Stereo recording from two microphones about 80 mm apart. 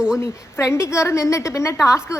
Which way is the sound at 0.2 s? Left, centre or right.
Left.